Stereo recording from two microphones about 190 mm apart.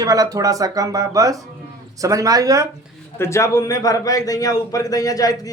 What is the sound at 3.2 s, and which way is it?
A man's voice, 15° left (ahead or behind).